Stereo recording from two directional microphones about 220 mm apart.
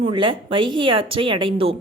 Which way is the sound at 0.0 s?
25° right (ahead or behind).